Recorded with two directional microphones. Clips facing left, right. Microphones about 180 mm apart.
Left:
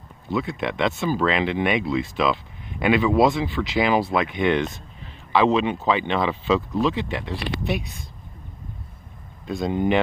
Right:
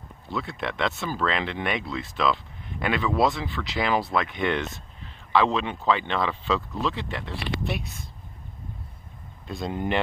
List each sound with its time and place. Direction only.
0.4 s speech: centre (ahead or behind); by 3.6 s 20° left (ahead or behind)
3.7 s speech: 5° left (ahead or behind)
7.0 s speech: centre (ahead or behind)
9.5 s speech: centre (ahead or behind)